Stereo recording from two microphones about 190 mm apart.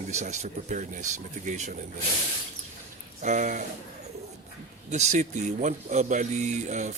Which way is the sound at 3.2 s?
40° right (ahead or behind).